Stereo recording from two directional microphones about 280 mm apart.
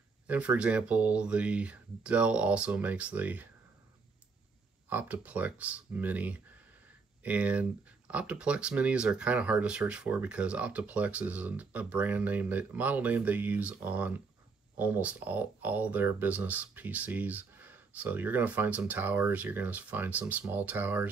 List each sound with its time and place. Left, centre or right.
0.3 s speech: centre
4.8 s speech: centre